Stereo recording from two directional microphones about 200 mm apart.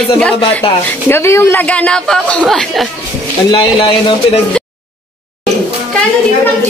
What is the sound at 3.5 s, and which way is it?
Speech, 25° left (ahead or behind).